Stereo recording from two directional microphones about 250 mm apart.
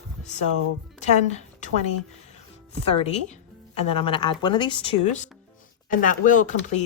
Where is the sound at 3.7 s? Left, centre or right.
Left.